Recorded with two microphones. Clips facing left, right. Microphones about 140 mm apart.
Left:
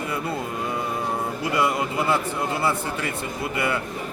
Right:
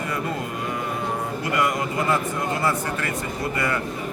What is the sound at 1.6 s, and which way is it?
Speech, 30° left (ahead or behind).